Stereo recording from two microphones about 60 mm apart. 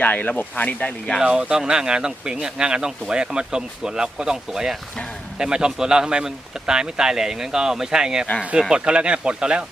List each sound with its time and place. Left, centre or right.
0.0 s speech: left
1.2 s speech: centre